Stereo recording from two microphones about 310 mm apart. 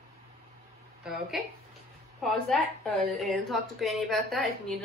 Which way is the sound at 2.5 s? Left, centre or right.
Centre.